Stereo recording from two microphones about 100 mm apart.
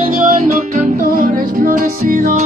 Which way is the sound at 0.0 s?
90° right.